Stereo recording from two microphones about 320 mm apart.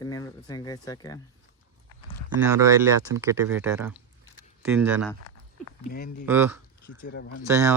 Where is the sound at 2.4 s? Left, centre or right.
Centre.